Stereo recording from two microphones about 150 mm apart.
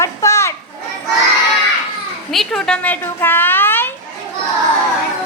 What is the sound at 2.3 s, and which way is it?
Speech, centre (ahead or behind).